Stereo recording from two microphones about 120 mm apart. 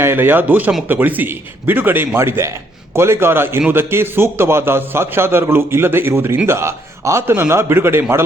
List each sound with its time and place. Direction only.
0.0 s a man's voice: 20° right (ahead or behind)